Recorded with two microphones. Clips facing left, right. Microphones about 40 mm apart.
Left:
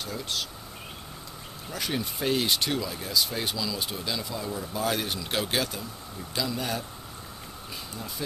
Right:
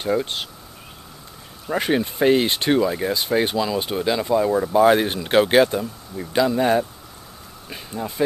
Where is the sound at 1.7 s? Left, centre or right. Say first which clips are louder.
Right 11 dB; right.